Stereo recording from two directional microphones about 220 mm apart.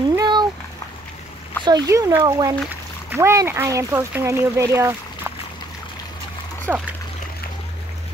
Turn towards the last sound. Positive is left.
turn(degrees=-10)  # may be behind; listen again after turning